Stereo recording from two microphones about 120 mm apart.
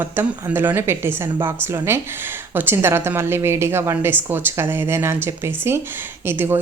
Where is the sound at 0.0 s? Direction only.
20° right (ahead or behind).